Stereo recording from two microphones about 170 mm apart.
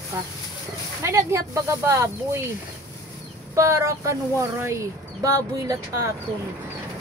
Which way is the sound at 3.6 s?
15° right (ahead or behind).